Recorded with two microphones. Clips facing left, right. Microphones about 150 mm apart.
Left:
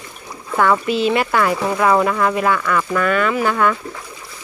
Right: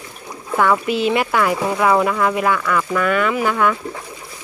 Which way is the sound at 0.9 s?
15° right (ahead or behind).